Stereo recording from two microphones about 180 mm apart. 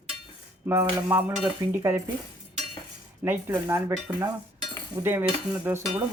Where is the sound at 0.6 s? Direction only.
15° right (ahead or behind).